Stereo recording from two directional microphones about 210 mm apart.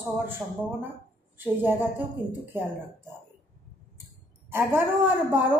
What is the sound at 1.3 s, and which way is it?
Speech, 10° right (ahead or behind).